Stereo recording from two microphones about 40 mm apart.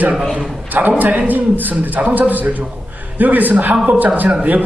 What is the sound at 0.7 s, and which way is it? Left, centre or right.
A woman's voice, right.